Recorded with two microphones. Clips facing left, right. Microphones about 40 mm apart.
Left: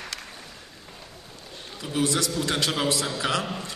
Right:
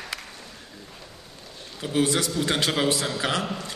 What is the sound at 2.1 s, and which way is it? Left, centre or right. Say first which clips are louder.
A man's voice: right 1 dB; right.